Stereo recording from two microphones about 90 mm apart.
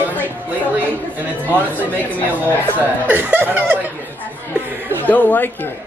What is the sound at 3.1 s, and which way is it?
Speech, 20° right (ahead or behind).